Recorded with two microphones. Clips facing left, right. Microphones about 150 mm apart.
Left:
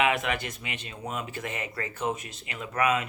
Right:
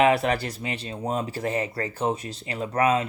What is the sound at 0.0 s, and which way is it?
Speech, 35° right (ahead or behind).